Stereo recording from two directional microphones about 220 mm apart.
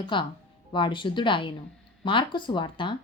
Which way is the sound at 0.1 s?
20° left (ahead or behind).